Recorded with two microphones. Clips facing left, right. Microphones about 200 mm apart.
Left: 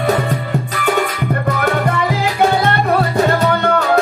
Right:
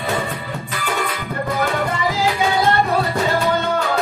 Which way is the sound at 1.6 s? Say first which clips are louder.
Left 2 dB; 60° left (ahead or behind).